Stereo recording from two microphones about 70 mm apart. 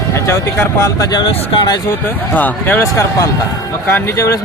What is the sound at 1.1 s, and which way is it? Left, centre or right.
Speech, left.